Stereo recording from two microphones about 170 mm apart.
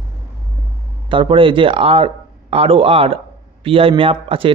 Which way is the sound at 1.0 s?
30° right (ahead or behind).